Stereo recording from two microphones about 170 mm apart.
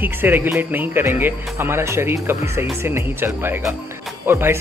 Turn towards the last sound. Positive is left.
turn(degrees=-15)  # may be behind; listen again after turning